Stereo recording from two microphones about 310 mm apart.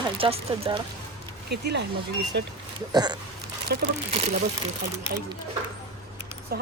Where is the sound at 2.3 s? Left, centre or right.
Right.